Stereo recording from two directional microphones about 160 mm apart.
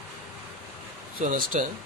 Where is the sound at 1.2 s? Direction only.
60° right (ahead or behind).